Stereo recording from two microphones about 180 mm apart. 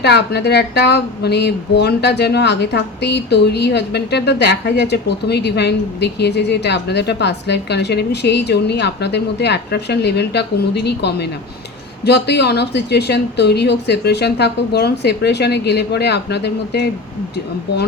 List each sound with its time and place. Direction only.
0.0 s speech: 65° left (ahead or behind)